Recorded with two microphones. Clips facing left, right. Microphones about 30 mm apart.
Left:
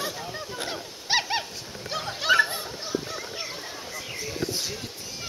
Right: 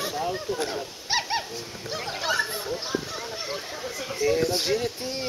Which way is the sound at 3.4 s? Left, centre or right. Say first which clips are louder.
Right 4 dB; right.